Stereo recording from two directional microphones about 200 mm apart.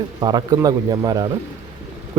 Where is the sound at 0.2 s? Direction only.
20° right (ahead or behind).